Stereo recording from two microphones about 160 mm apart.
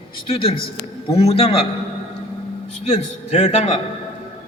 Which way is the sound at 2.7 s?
40° left (ahead or behind).